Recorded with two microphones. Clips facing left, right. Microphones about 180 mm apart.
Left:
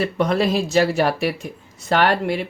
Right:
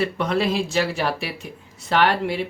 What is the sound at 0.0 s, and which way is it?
Speech, 40° left (ahead or behind).